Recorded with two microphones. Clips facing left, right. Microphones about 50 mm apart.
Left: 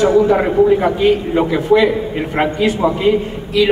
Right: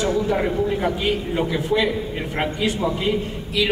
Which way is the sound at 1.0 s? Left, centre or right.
Centre.